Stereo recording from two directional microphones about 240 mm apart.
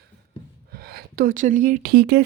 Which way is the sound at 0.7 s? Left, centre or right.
Right.